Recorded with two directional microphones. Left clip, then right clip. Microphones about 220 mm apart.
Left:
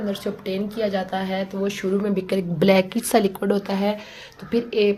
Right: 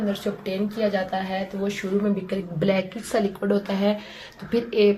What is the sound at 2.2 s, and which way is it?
A woman's voice, 40° left (ahead or behind).